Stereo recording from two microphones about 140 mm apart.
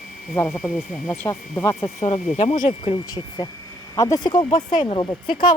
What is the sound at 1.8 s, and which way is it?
Speech, 40° left (ahead or behind).